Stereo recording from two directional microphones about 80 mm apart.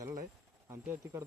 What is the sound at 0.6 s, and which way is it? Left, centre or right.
Speech, right.